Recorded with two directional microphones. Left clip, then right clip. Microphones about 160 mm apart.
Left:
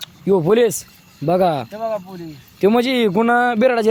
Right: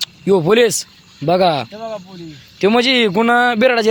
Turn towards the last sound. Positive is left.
turn(degrees=10)  # may be behind; listen again after turning